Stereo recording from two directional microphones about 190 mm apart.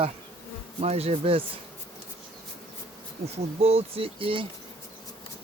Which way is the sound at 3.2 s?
30° right (ahead or behind).